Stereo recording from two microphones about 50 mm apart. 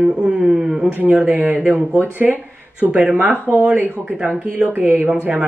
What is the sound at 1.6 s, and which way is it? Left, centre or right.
Speech, right.